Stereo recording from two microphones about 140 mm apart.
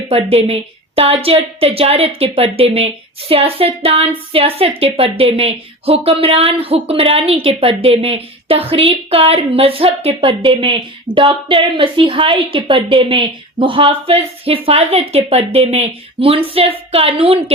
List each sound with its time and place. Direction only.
0.1 s a woman's voice: 45° right (ahead or behind)